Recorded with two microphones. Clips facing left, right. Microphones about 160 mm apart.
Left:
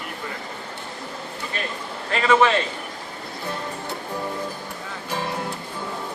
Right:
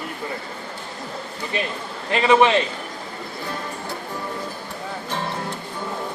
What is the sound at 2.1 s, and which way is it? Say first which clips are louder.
Speech: right 2 dB; 20° right (ahead or behind).